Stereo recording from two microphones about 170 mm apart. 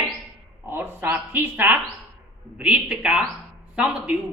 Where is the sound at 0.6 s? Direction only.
10° right (ahead or behind).